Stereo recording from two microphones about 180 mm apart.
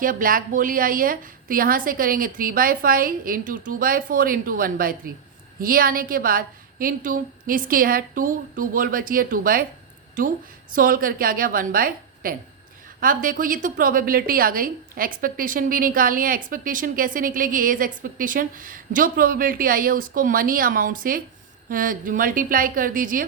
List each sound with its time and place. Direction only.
0.0 s a woman's voice: 50° right (ahead or behind)
10.8 s a woman's voice: 50° right (ahead or behind)